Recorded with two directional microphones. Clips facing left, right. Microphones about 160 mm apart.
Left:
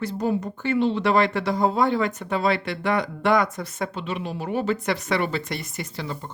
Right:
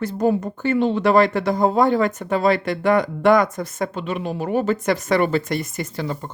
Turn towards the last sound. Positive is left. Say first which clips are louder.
# right 5 dB
turn(degrees=-45)  # may be behind; listen again after turning